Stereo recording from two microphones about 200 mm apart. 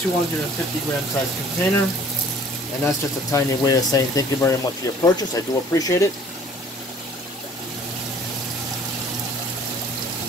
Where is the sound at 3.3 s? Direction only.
15° left (ahead or behind).